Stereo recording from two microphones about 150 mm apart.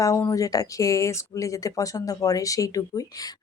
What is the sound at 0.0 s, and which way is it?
Speech, 20° left (ahead or behind).